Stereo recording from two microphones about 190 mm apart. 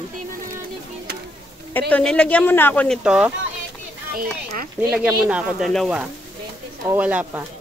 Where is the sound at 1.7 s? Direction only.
10° left (ahead or behind).